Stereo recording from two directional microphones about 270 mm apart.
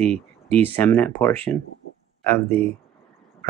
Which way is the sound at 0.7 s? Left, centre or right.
Centre.